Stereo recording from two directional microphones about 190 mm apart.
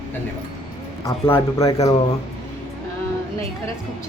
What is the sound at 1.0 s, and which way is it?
Speech, 15° left (ahead or behind).